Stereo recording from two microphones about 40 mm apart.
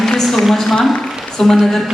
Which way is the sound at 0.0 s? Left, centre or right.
Centre.